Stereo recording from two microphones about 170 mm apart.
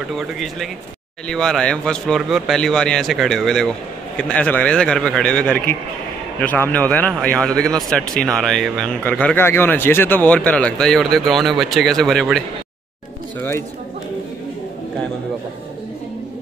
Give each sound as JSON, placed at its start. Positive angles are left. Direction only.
{"t": 1.2, "sound": "a man's voice", "side_deg": 5}
{"t": 13.4, "sound": "a man's voice", "side_deg": 15}